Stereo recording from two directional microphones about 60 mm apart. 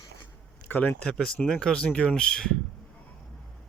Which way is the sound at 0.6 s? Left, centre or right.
Left.